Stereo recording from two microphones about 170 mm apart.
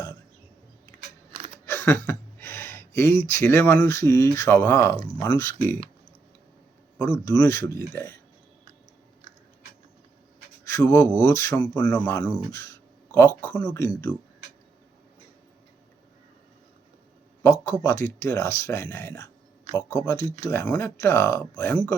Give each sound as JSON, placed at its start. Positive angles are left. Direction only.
{"t": 1.6, "sound": "speech", "side_deg": 15}
{"t": 7.0, "sound": "speech", "side_deg": 20}
{"t": 10.7, "sound": "speech", "side_deg": 20}
{"t": 11.9, "sound": "speech", "side_deg": 10}
{"t": 12.2, "sound": "speech", "side_deg": 20}
{"t": 17.4, "sound": "speech", "side_deg": 15}
{"t": 20.4, "sound": "speech", "side_deg": 15}